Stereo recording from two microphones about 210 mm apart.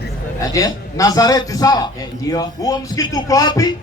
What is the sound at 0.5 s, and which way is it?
A man's voice, 15° left (ahead or behind).